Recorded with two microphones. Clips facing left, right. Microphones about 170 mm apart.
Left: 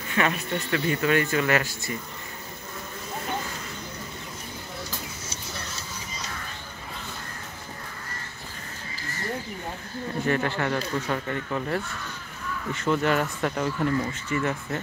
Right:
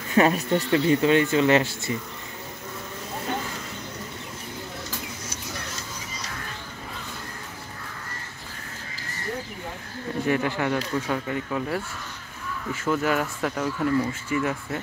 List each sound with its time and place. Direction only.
0.1 s speech: 35° right (ahead or behind)
0.7 s speech: 25° right (ahead or behind)
10.2 s speech: 10° right (ahead or behind)